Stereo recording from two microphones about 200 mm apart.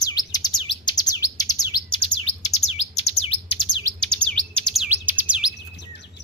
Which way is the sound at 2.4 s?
30° left (ahead or behind).